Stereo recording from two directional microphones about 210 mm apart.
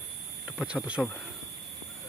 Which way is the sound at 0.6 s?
Centre (ahead or behind).